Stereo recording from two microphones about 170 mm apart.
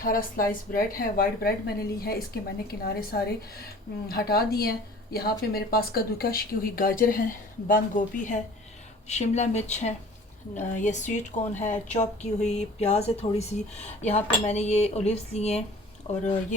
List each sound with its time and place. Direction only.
0.0 s speech: 55° left (ahead or behind); by 15.6 s 40° left (ahead or behind)